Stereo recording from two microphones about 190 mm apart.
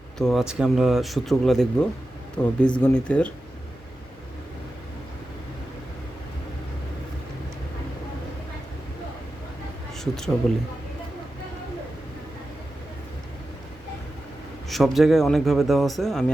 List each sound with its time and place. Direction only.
0.2 s speech: centre (ahead or behind)
10.0 s speech: centre (ahead or behind)
14.7 s speech: centre (ahead or behind)